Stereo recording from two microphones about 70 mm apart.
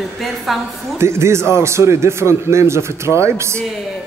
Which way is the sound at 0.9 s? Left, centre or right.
Right.